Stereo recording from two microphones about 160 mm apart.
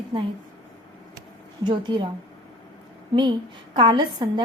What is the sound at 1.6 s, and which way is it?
Speech, 30° right (ahead or behind).